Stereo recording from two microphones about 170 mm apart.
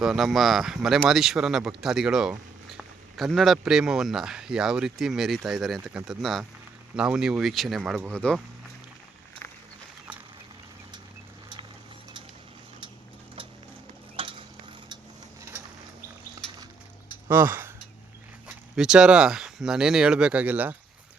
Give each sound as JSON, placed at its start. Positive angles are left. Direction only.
{"t": 0.0, "sound": "speech", "side_deg": -5}
{"t": 14.2, "sound": "stir", "side_deg": -30}
{"t": 17.2, "sound": "speech", "side_deg": -10}